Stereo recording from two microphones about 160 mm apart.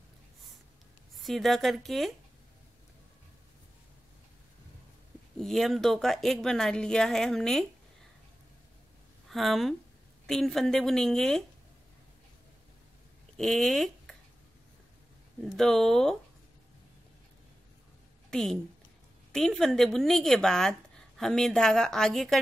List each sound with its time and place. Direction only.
1.2 s a woman's voice: centre (ahead or behind)
5.4 s a woman's voice: centre (ahead or behind)
9.3 s a woman's voice: centre (ahead or behind)
13.4 s speech: 5° left (ahead or behind)
15.4 s a woman's voice: centre (ahead or behind)
18.3 s a woman's voice: 5° left (ahead or behind)